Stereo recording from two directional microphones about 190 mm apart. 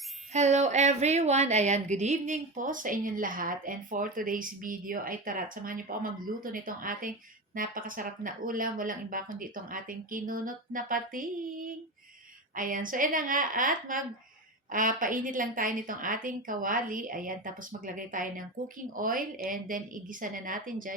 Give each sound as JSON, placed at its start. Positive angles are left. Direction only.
{"t": 0.3, "sound": "a woman's voice", "side_deg": -35}